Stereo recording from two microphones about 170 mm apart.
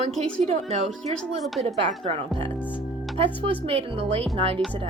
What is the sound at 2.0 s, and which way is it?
Speech, 30° right (ahead or behind).